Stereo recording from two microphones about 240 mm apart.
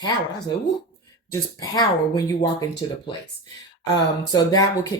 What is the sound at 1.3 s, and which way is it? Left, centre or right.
Speech, centre.